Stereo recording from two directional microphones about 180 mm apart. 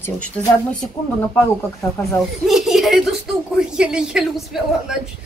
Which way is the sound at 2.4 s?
Centre (ahead or behind).